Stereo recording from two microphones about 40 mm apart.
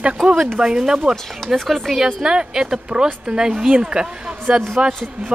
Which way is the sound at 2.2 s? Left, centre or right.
Centre.